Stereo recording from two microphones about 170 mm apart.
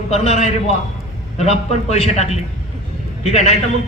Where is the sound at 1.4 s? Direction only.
40° left (ahead or behind).